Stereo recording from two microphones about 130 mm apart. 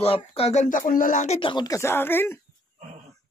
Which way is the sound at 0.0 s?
50° left (ahead or behind).